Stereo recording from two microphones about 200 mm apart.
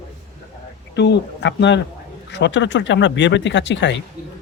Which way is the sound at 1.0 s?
60° left (ahead or behind).